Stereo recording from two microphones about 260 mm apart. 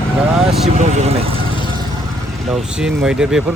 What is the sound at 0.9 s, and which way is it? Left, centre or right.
Speech, right.